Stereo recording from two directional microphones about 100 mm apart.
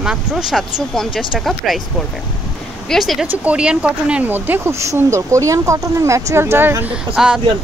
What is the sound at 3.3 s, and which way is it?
Speech, 15° right (ahead or behind).